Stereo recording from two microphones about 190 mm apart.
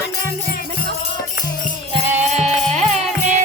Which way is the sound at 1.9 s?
35° right (ahead or behind).